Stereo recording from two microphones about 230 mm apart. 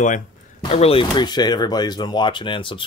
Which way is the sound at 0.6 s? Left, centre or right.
Left.